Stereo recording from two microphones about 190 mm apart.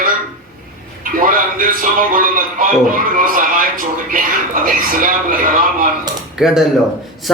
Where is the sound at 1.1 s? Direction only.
45° right (ahead or behind).